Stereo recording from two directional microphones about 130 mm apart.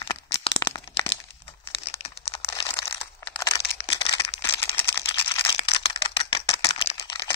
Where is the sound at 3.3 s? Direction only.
40° left (ahead or behind).